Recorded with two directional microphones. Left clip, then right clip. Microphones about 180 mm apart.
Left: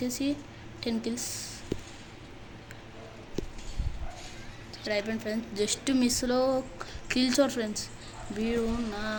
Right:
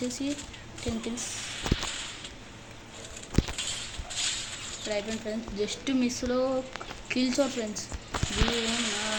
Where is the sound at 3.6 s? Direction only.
50° right (ahead or behind).